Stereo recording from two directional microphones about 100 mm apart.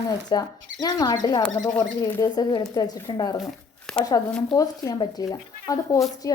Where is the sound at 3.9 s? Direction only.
5° left (ahead or behind).